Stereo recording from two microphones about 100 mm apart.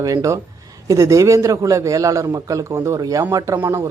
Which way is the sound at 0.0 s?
35° right (ahead or behind).